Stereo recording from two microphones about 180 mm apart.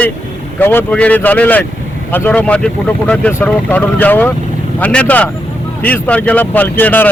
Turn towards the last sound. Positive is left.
turn(degrees=10)  # may be behind; listen again after turning